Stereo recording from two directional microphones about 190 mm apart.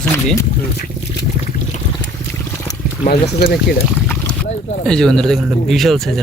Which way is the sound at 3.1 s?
55° left (ahead or behind).